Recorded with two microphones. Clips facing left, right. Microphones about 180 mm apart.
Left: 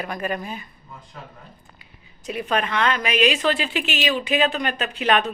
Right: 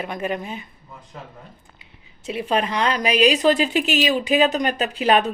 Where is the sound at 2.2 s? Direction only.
30° right (ahead or behind).